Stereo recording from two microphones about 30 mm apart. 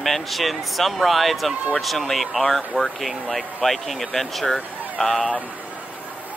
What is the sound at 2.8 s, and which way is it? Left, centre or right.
Speech, left.